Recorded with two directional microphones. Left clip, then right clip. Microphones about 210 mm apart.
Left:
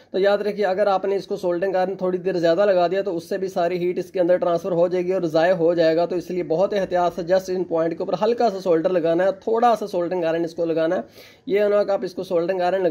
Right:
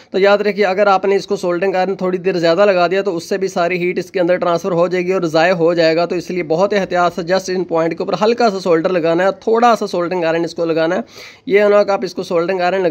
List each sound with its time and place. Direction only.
0.1 s a man's voice: 30° right (ahead or behind)